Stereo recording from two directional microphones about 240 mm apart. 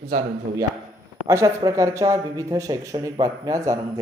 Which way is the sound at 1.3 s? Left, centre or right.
Centre.